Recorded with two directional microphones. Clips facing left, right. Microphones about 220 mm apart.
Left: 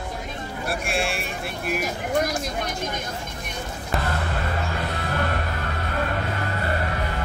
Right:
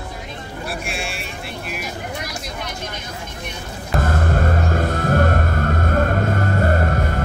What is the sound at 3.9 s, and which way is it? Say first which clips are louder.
Music: right 7 dB; 45° right (ahead or behind).